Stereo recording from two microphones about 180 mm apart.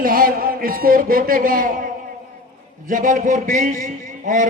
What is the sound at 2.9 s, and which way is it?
A man's voice, 45° right (ahead or behind).